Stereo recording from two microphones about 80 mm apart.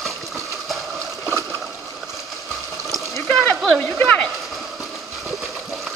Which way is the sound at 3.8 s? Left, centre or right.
Centre.